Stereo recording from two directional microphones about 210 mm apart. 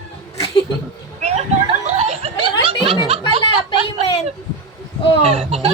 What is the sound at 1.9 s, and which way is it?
Snicker, 30° right (ahead or behind).